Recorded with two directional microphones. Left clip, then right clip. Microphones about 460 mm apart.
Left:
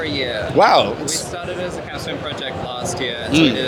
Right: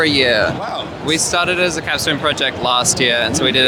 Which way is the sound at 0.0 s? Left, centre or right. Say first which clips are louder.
Right 9 dB; right.